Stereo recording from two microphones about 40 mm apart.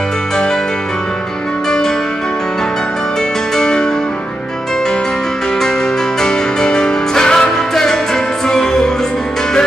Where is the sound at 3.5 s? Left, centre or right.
Centre.